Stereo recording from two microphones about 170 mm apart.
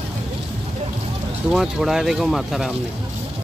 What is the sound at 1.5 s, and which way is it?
Speech, 5° right (ahead or behind).